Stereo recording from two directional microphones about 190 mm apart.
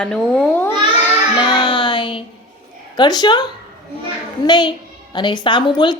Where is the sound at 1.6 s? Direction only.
25° left (ahead or behind).